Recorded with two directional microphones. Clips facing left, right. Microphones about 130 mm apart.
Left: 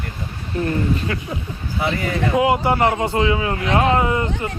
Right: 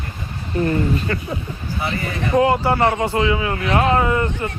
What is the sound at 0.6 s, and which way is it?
Speech, 5° left (ahead or behind).